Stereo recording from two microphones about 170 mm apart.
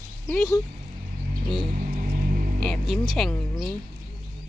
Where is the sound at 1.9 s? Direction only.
55° right (ahead or behind).